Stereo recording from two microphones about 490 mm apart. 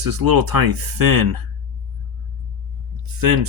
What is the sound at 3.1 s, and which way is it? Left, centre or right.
Speech, right.